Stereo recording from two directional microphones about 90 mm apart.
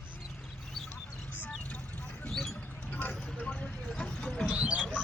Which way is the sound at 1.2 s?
20° left (ahead or behind).